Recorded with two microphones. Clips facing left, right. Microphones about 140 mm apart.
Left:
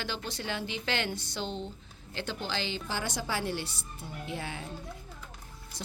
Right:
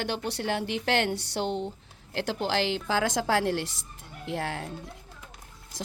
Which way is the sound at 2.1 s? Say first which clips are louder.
Right 7 dB; 90° right.